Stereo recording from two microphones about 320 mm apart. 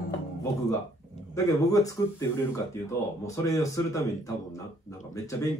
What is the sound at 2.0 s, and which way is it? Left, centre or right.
Speech, centre.